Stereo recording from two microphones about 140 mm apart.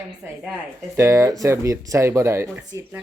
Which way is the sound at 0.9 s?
20° right (ahead or behind).